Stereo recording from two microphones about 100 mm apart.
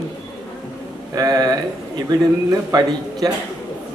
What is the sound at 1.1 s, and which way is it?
A man's voice, 40° right (ahead or behind).